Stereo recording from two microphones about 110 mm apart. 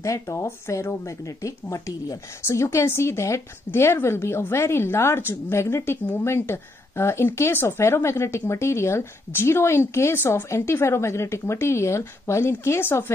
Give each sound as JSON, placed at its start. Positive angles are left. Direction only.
{"t": 0.0, "sound": "speech", "side_deg": 30}